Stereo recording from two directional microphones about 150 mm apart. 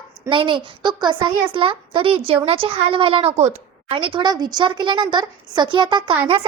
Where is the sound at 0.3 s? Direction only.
35° right (ahead or behind).